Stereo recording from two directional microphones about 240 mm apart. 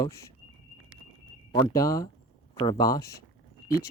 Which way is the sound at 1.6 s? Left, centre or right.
Centre.